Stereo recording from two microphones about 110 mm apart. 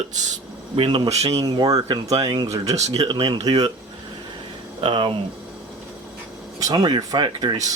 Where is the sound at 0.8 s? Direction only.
50° right (ahead or behind).